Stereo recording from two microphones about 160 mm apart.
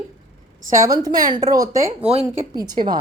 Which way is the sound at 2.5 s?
25° right (ahead or behind).